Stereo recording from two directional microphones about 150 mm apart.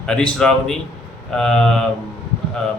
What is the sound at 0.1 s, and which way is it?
Speech, 5° left (ahead or behind).